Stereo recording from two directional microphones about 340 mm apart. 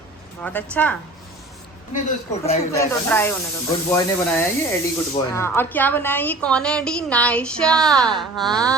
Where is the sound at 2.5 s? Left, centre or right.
Centre.